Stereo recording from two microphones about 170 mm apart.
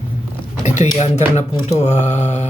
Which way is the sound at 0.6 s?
45° left (ahead or behind).